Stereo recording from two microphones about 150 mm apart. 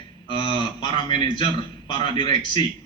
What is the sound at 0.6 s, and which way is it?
Speech, 30° left (ahead or behind).